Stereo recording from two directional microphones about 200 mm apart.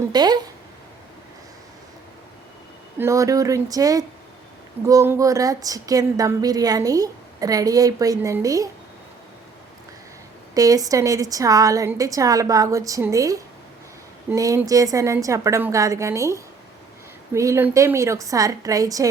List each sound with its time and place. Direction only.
0.1 s a sound: 20° right (ahead or behind)
3.0 s a woman's voice: 15° right (ahead or behind)
10.5 s a woman's voice: 15° right (ahead or behind)